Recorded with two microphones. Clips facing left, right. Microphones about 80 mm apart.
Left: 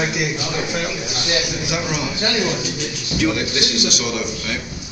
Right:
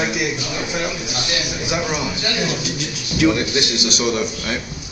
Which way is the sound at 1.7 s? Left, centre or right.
Right.